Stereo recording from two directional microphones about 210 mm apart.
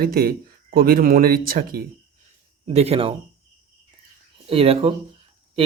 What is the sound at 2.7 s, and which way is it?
Speech, 30° right (ahead or behind).